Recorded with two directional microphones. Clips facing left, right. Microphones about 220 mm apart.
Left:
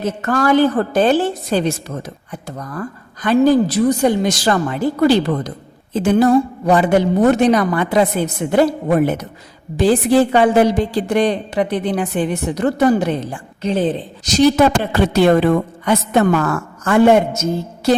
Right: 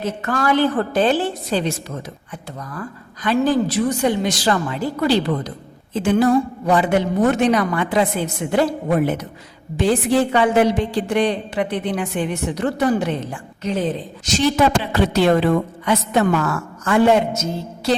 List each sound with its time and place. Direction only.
0.2 s a woman's voice: 45° left (ahead or behind); by 13.9 s 30° left (ahead or behind)
14.3 s a woman's voice: 45° left (ahead or behind)